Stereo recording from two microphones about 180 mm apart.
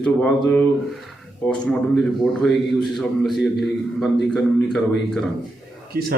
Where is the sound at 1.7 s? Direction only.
5° left (ahead or behind).